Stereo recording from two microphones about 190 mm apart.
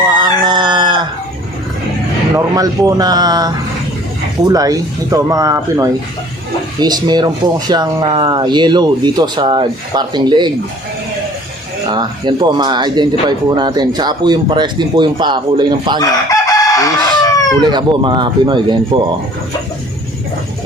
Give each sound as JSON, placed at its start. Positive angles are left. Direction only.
{"t": 0.2, "sound": "chicken", "side_deg": -25}
{"t": 2.3, "sound": "speech", "side_deg": -20}
{"t": 11.9, "sound": "speech", "side_deg": -20}
{"t": 16.0, "sound": "chicken", "side_deg": 20}
{"t": 17.6, "sound": "speech", "side_deg": -25}